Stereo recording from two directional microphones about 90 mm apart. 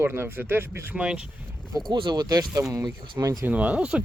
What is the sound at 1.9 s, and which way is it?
Speech, 55° right (ahead or behind).